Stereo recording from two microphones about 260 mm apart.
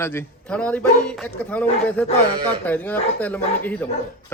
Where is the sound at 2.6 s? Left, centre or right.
Centre.